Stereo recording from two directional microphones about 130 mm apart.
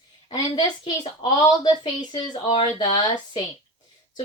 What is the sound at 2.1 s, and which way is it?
A woman's voice, 30° left (ahead or behind).